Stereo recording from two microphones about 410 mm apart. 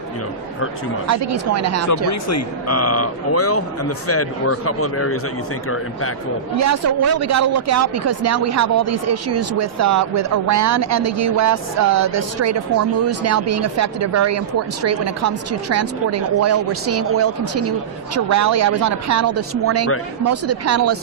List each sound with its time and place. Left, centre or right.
1.0 s speech: right
2.0 s speech: left
6.6 s speech: right